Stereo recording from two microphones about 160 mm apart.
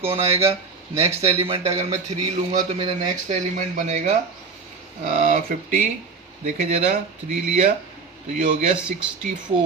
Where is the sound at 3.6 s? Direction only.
45° right (ahead or behind).